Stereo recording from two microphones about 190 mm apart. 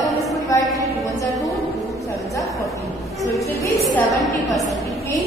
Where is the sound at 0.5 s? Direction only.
15° left (ahead or behind).